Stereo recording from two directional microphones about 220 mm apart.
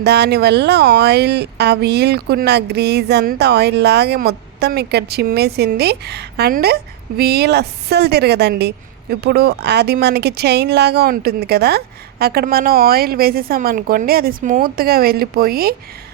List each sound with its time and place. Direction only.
0.0 s a woman's voice: 50° right (ahead or behind)